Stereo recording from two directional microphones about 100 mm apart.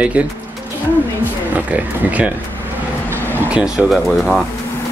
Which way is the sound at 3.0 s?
25° right (ahead or behind).